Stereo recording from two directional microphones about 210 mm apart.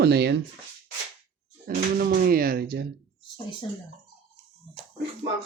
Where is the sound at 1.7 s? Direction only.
45° right (ahead or behind).